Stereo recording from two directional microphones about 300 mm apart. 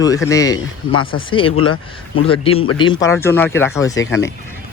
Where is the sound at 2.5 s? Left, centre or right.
Left.